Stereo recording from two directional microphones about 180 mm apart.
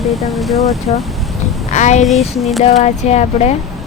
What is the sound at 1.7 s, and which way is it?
Speech, 40° left (ahead or behind).